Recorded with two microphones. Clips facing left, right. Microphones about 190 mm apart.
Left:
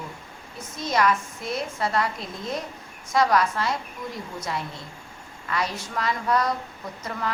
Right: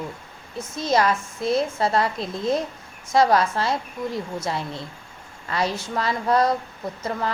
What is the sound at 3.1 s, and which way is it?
Speech, 30° right (ahead or behind).